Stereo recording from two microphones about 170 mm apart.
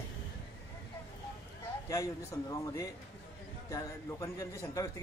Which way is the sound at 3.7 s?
15° left (ahead or behind).